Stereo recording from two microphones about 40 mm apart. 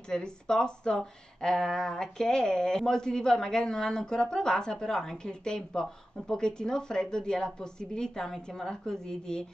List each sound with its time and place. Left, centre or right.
0.1 s speech: centre